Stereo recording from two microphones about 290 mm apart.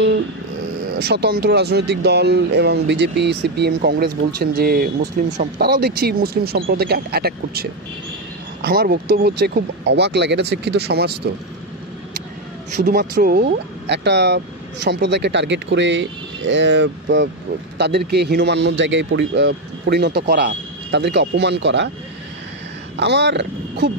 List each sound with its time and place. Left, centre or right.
0.9 s speech: right
8.6 s speech: right
12.8 s speech: right
22.9 s speech: right